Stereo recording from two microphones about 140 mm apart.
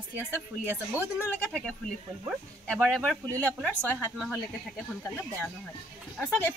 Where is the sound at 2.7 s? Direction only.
5° left (ahead or behind).